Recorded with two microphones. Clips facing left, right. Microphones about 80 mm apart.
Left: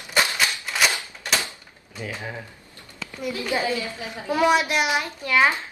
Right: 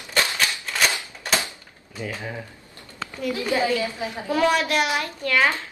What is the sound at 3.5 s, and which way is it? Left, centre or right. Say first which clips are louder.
A woman's voice: right 3 dB; left.